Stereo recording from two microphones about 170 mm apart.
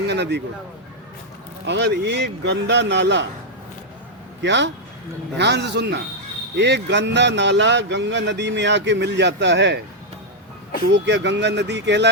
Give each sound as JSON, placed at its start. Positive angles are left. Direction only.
{"t": 0.1, "sound": "speech", "side_deg": -80}
{"t": 1.6, "sound": "speech", "side_deg": -90}
{"t": 4.4, "sound": "speech", "side_deg": -90}
{"t": 10.9, "sound": "speech", "side_deg": -90}